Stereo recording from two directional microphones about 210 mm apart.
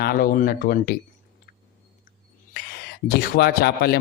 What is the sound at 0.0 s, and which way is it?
Speech, 45° left (ahead or behind).